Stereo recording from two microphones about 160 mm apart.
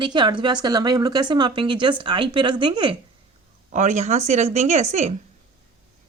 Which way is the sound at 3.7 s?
45° right (ahead or behind).